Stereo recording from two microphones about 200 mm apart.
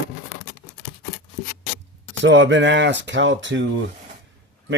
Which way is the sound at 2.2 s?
65° right (ahead or behind).